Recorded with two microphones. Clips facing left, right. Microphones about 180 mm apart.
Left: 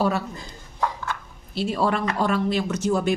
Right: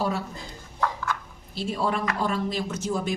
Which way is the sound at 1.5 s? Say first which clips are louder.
Left 4 dB; 70° left (ahead or behind).